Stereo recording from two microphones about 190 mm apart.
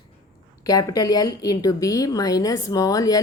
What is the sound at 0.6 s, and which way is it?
Speech, 20° left (ahead or behind).